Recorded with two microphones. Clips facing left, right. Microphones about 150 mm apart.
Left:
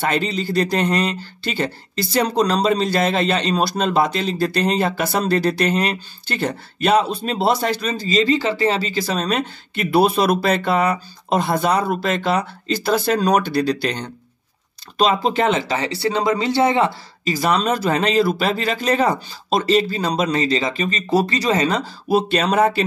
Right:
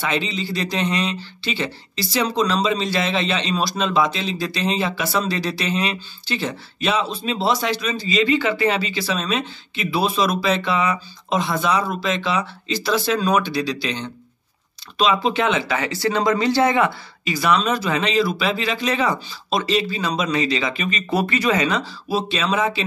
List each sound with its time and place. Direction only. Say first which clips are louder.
0.0 s speech: left 3 dB; 45° left (ahead or behind); by 16.9 s 25° left (ahead or behind)
17.2 s speech: left 1 dB; 40° left (ahead or behind)